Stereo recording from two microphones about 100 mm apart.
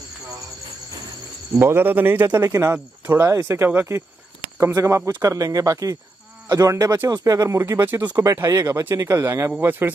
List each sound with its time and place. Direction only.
1.6 s speech: 20° right (ahead or behind)
9.6 s speech: 20° right (ahead or behind)